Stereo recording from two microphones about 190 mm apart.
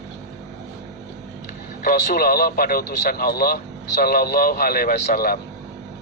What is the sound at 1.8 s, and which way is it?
A man's voice, 50° left (ahead or behind).